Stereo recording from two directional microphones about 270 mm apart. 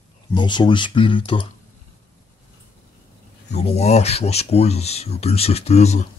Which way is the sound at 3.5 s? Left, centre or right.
Left.